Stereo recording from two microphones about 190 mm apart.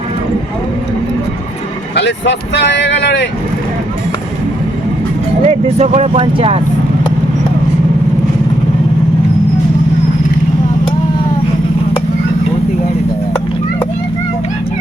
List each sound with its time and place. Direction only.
2.0 s speech: 65° left (ahead or behind)
5.5 s speech: 35° right (ahead or behind)